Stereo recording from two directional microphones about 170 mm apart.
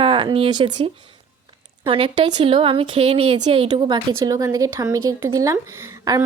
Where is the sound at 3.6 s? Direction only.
25° right (ahead or behind).